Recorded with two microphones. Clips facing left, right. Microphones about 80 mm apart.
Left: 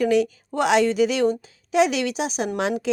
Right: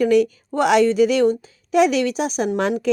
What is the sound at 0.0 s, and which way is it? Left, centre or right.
A woman's voice, right.